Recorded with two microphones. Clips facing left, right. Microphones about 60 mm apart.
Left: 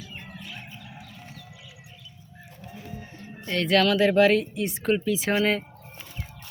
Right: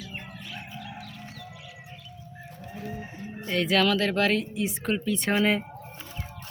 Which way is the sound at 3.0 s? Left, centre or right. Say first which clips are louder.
Right 4 dB; centre.